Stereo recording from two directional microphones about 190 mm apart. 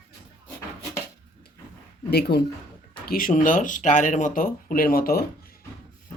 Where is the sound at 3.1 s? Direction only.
45° left (ahead or behind).